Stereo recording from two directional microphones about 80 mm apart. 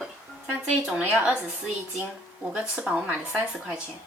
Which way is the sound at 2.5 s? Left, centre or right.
Centre.